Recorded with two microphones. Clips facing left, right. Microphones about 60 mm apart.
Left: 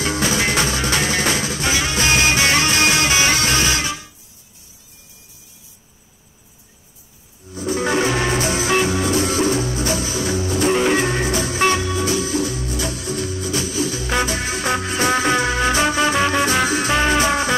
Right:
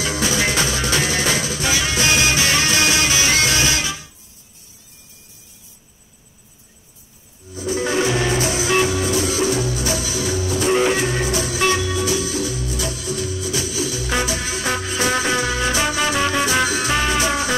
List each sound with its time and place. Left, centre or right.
0.0 s music: left
7.4 s music: left